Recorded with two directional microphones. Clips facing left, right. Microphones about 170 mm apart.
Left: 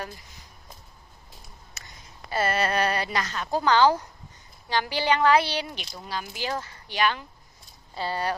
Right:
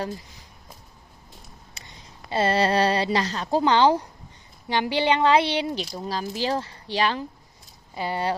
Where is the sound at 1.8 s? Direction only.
25° right (ahead or behind).